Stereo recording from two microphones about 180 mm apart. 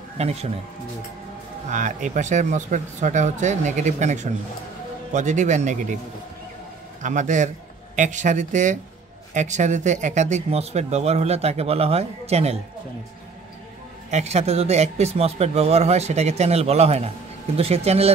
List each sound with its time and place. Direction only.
0.2 s speech: 35° right (ahead or behind)
1.7 s speech: 45° right (ahead or behind)
7.0 s a man's voice: 45° right (ahead or behind)
14.1 s speech: 35° right (ahead or behind)